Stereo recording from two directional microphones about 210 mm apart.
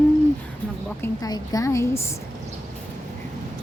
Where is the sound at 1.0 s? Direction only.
15° left (ahead or behind).